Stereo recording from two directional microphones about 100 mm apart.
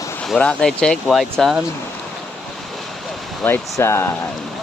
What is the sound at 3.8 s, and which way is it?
Speech, 25° left (ahead or behind).